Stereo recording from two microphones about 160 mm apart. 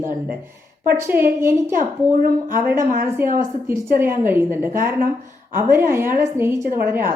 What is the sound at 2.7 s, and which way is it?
Speech, 55° right (ahead or behind).